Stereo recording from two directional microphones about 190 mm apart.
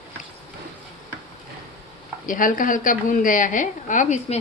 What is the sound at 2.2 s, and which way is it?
A woman's voice, 45° left (ahead or behind).